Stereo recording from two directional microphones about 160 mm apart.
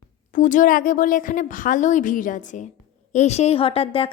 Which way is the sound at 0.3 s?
55° left (ahead or behind).